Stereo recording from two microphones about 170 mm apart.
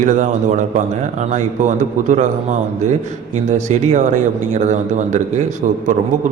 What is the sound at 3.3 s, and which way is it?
A man's voice, 45° right (ahead or behind).